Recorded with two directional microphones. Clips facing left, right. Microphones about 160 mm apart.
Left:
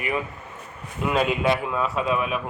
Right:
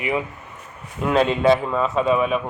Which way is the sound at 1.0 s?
5° left (ahead or behind).